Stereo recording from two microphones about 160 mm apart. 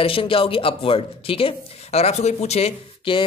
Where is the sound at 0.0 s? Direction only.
35° left (ahead or behind).